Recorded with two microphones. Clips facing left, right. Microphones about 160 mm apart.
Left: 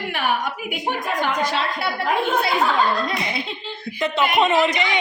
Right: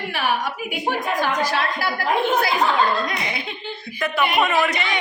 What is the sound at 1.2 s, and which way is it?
A woman's voice, 25° left (ahead or behind).